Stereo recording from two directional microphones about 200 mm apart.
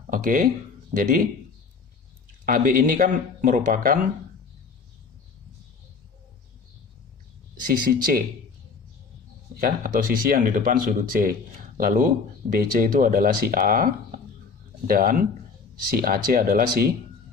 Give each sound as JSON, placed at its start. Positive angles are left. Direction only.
{"t": 0.1, "sound": "speech", "side_deg": -40}
{"t": 2.5, "sound": "speech", "side_deg": -45}
{"t": 7.6, "sound": "speech", "side_deg": -45}
{"t": 9.6, "sound": "speech", "side_deg": -45}